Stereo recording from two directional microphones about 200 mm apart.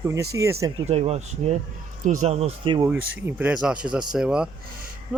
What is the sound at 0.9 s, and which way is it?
Speech, 30° right (ahead or behind).